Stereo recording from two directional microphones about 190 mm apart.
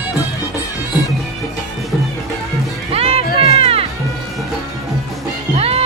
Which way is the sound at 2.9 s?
30° right (ahead or behind).